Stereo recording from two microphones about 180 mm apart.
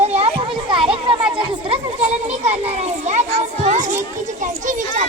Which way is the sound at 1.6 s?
35° right (ahead or behind).